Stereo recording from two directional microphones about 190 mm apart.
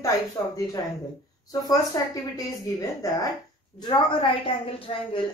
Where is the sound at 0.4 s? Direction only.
15° left (ahead or behind).